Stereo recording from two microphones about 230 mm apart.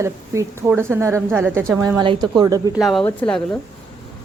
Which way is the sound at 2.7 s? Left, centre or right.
Centre.